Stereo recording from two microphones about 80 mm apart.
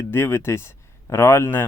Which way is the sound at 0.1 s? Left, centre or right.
Left.